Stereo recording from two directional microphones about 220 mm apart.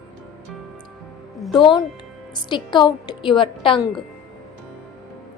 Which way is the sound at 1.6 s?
20° left (ahead or behind).